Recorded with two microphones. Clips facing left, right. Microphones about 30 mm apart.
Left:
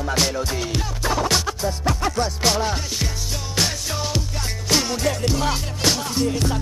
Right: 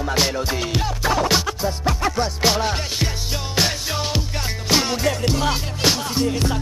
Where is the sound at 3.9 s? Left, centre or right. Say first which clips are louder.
Right 2 dB; right.